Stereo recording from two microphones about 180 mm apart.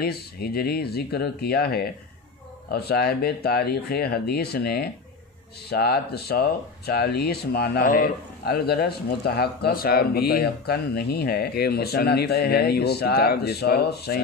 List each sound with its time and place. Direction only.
0.0 s speech: 60° left (ahead or behind)